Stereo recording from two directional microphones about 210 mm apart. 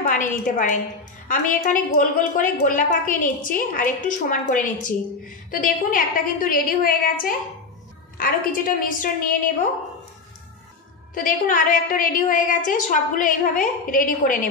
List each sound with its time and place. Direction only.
0.0 s a woman's voice: 40° left (ahead or behind)
11.1 s a woman's voice: 40° left (ahead or behind)